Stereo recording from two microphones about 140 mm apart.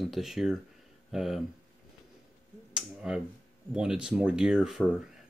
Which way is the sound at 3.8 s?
5° right (ahead or behind).